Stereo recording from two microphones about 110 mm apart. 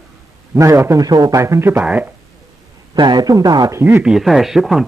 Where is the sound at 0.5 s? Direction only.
25° right (ahead or behind).